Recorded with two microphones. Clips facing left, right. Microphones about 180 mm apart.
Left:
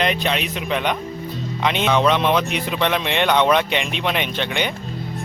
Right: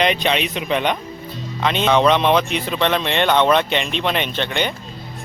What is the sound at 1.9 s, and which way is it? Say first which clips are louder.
A man's voice: right 3 dB; 5° left (ahead or behind).